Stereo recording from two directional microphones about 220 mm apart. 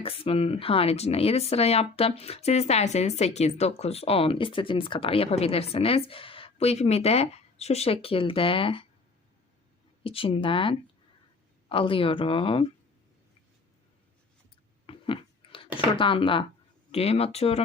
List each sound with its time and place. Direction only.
0.0 s speech: 25° left (ahead or behind)
10.0 s speech: 25° left (ahead or behind)
14.8 s chewing: 25° left (ahead or behind)
16.0 s speech: 25° left (ahead or behind)